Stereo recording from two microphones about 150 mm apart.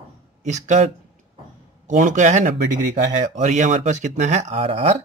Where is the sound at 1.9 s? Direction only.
55° right (ahead or behind).